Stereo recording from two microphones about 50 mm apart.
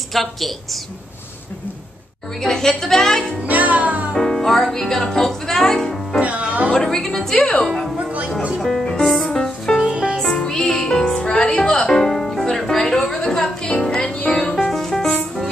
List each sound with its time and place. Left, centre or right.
0.1 s a woman's voice: centre
2.4 s speech: centre
3.4 s music: right
4.1 s music: centre
6.2 s music: right
6.7 s speech: centre
7.3 s a woman's voice: left
8.5 s speech: centre
8.8 s music: centre
9.8 s music: right
10.1 s music: centre